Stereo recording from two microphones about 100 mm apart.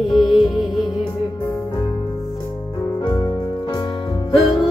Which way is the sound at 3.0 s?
50° left (ahead or behind).